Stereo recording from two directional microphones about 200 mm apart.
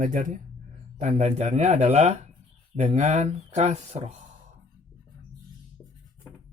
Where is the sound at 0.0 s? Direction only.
40° right (ahead or behind).